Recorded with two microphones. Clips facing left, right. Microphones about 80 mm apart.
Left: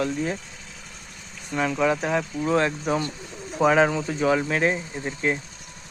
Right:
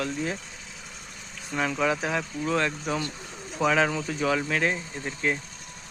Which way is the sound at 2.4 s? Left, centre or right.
Left.